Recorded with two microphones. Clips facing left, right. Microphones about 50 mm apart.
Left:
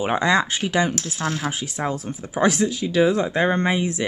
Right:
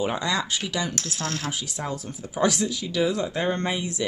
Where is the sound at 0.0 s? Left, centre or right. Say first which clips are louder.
Left 6 dB; left.